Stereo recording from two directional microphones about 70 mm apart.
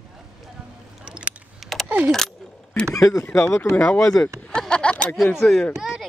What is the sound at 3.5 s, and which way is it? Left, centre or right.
Speech, left.